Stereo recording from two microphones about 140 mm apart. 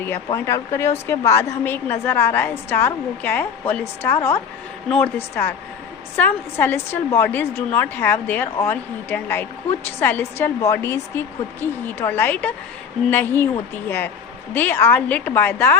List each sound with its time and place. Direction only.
0.3 s a woman's voice: 20° left (ahead or behind)